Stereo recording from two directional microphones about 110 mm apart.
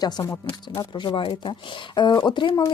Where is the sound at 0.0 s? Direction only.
40° left (ahead or behind).